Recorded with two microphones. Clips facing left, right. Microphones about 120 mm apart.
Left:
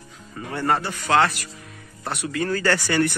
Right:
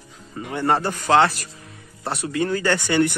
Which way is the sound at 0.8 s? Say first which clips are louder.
Right 5 dB; 45° right (ahead or behind).